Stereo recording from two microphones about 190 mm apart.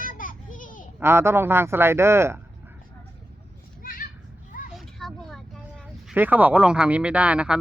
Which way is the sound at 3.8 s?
50° left (ahead or behind).